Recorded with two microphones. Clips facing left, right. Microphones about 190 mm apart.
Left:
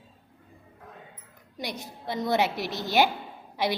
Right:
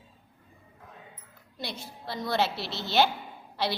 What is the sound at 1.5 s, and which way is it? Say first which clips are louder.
A woman's voice: left 3 dB; 15° left (ahead or behind).